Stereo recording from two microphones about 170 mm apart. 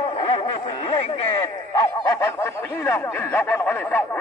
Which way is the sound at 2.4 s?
15° left (ahead or behind).